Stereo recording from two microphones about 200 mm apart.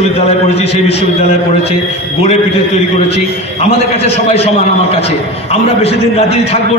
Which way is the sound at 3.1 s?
30° left (ahead or behind).